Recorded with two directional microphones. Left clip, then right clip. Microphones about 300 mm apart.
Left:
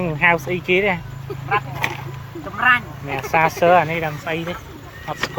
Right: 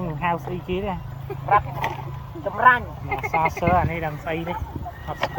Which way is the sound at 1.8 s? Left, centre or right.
Centre.